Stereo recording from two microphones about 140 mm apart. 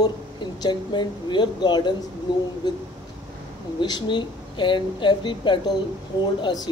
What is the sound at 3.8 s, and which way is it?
Speech, 30° left (ahead or behind).